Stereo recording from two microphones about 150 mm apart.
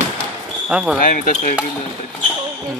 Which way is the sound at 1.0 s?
65° left (ahead or behind).